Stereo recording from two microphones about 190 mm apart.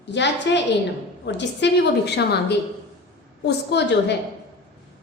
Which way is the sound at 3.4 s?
65° left (ahead or behind).